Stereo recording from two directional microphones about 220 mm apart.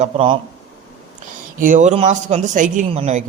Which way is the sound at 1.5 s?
35° right (ahead or behind).